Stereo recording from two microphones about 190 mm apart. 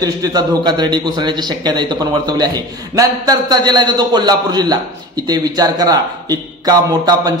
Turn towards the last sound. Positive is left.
turn(degrees=-20)  # may be behind; listen again after turning